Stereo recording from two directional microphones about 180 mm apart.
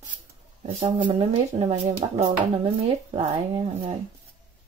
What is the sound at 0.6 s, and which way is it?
Speech, 35° right (ahead or behind).